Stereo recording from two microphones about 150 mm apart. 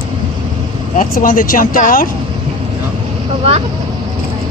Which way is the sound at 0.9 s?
65° left (ahead or behind).